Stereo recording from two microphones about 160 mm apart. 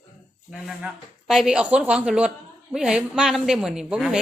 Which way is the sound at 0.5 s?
5° right (ahead or behind).